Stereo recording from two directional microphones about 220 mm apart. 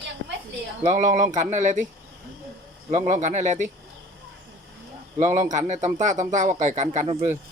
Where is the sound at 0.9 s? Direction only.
35° right (ahead or behind).